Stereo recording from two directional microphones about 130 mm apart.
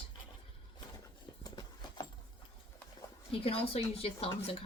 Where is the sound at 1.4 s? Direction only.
30° left (ahead or behind).